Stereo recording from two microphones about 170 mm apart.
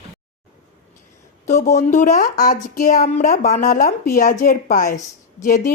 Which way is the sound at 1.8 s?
45° left (ahead or behind).